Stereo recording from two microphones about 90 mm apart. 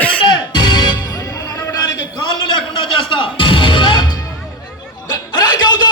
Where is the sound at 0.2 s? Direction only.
60° left (ahead or behind).